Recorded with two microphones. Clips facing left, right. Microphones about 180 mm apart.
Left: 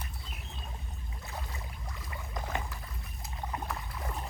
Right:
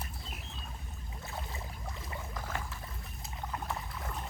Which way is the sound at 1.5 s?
25° right (ahead or behind).